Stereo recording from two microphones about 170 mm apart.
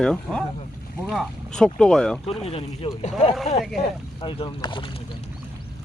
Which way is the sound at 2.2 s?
35° left (ahead or behind).